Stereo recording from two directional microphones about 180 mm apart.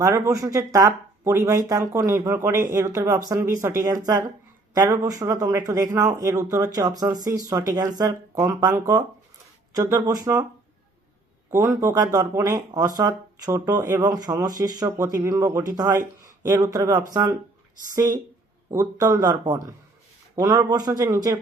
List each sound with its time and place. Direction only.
0.0 s speech: 15° right (ahead or behind)
11.5 s speech: 15° right (ahead or behind)